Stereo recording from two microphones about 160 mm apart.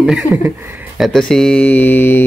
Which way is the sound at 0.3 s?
15° left (ahead or behind).